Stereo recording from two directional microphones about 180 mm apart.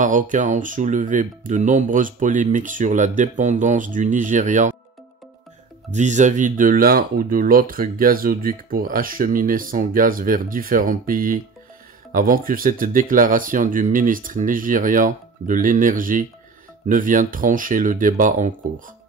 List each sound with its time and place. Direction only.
0.0 s speech: 45° right (ahead or behind)
5.9 s speech: 40° right (ahead or behind)